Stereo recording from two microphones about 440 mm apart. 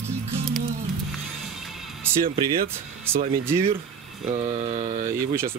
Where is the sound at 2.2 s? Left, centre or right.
Centre.